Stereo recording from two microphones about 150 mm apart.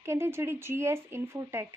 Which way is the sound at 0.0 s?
15° right (ahead or behind).